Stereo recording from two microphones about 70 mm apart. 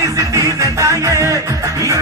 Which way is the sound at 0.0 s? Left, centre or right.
Right.